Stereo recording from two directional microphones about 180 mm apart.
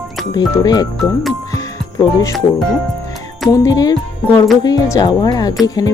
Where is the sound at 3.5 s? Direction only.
20° left (ahead or behind).